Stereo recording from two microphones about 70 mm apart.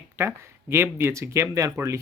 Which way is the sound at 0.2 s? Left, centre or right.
Right.